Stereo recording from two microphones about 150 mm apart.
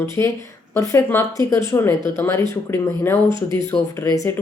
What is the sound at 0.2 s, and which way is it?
Speech, 20° left (ahead or behind).